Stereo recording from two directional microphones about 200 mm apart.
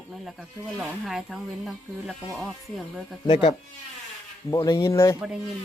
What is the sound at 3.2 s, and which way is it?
A man's voice, 20° left (ahead or behind).